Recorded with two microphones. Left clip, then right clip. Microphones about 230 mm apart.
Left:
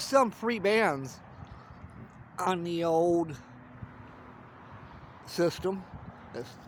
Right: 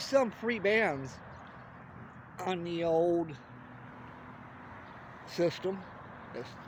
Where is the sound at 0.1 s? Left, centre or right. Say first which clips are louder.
Left 3 dB; left.